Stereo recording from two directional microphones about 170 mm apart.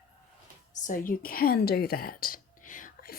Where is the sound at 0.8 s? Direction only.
55° left (ahead or behind).